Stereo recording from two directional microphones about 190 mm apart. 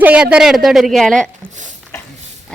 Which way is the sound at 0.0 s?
5° right (ahead or behind).